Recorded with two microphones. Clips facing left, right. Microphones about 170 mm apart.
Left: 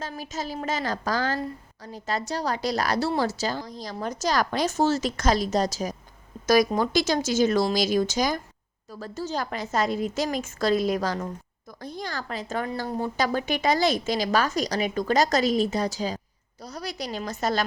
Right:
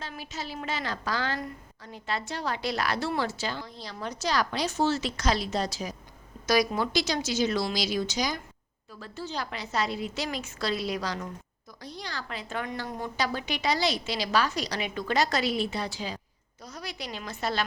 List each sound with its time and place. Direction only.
0.0 s a woman's voice: 40° left (ahead or behind)